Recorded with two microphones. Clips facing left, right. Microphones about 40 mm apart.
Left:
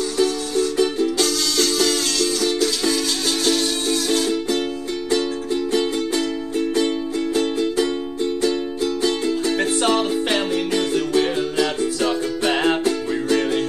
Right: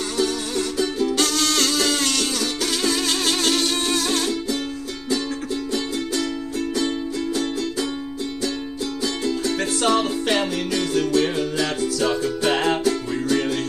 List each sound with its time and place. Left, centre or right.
1.1 s music: right
9.0 s music: left